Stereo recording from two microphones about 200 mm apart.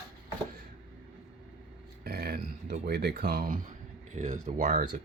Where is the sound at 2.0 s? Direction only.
50° right (ahead or behind).